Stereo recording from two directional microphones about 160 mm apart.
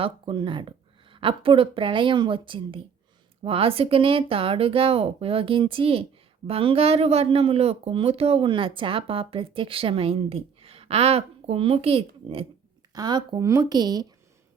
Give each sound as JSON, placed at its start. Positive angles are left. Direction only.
{"t": 0.0, "sound": "a woman's voice", "side_deg": -30}